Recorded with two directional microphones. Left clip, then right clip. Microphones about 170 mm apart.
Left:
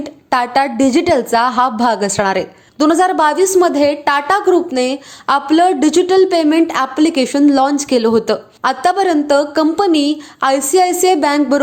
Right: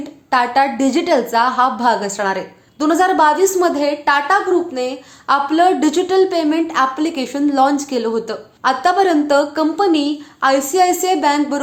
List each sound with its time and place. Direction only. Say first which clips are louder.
0.3 s a woman's voice: even; 40° left (ahead or behind)